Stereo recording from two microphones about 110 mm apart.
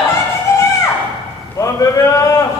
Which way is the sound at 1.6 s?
30° left (ahead or behind).